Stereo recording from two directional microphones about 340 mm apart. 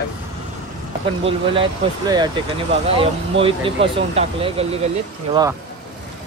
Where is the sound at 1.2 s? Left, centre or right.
Centre.